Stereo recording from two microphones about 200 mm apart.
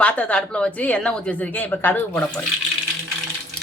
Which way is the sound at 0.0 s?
5° left (ahead or behind).